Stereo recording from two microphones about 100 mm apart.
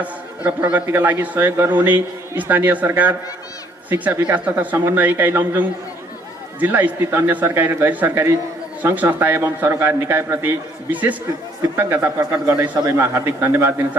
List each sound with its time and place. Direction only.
0.0 s a man's voice: 15° right (ahead or behind)